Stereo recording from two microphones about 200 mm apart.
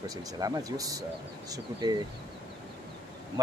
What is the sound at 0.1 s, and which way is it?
Speech, 20° right (ahead or behind).